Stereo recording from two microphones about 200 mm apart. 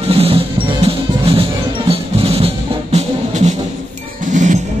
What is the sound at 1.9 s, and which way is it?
Music, 30° right (ahead or behind).